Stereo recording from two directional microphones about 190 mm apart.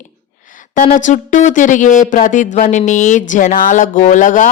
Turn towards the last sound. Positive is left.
turn(degrees=45)  # may be behind; listen again after turning